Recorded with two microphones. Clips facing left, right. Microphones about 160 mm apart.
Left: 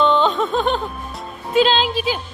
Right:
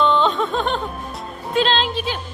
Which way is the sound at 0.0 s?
Centre (ahead or behind).